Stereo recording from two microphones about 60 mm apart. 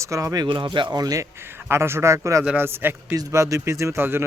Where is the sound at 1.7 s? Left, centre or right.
Right.